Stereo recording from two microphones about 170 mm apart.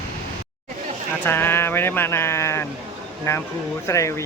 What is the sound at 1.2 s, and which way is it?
Speech, 10° left (ahead or behind).